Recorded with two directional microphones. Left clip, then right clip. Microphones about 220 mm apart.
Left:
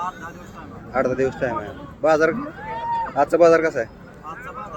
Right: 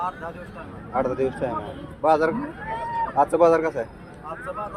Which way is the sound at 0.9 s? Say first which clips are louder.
Left 3 dB; 35° left (ahead or behind).